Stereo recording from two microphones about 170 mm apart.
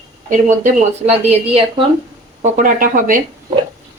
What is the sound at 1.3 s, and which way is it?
Speech, 35° right (ahead or behind).